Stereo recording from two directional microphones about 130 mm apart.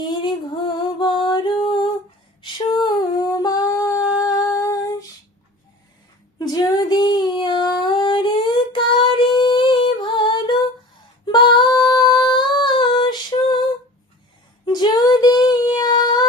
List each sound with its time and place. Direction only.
0.0 s music: 35° left (ahead or behind)
2.4 s a sound: 35° left (ahead or behind)
4.2 s humming: 25° left (ahead or behind)
6.4 s female singing: 30° left (ahead or behind)
14.6 s female singing: 35° left (ahead or behind)